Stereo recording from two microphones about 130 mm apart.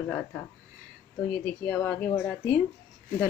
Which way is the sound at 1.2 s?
15° left (ahead or behind).